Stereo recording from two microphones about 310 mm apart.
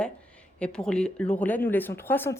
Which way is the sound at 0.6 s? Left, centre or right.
Centre.